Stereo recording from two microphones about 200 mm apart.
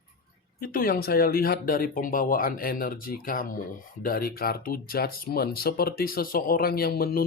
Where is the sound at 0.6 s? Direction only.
45° left (ahead or behind).